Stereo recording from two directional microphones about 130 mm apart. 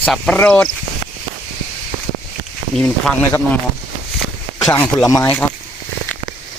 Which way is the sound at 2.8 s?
5° left (ahead or behind).